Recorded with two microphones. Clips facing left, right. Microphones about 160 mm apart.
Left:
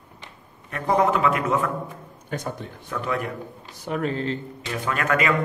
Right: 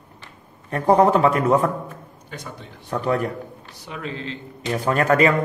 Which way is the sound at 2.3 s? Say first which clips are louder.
Left 6 dB; 50° left (ahead or behind).